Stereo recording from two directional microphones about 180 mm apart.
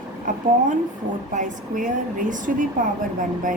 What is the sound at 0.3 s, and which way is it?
Speech, 45° right (ahead or behind).